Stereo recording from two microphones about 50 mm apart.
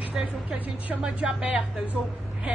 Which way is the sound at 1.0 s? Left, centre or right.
Right.